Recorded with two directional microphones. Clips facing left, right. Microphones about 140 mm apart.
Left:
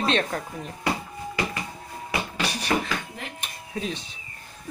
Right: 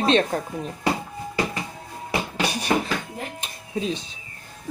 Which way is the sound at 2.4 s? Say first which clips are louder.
Right 3 dB; 50° right (ahead or behind).